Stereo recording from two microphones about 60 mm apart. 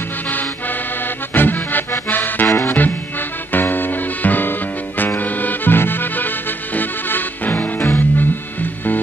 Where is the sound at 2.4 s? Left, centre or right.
Left.